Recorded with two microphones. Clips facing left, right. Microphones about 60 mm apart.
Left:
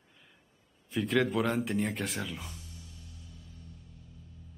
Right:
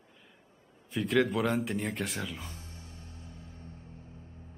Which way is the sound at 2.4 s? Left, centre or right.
Right.